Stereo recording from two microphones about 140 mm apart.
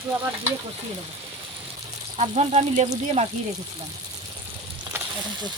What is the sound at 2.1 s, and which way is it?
Speech, 50° right (ahead or behind).